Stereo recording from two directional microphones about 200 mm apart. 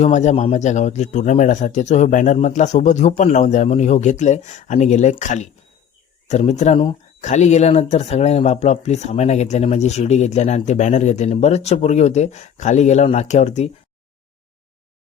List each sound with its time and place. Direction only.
0.0 s speech: 35° left (ahead or behind)